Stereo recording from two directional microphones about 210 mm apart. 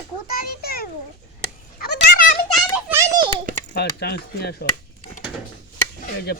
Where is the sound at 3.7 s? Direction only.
50° left (ahead or behind).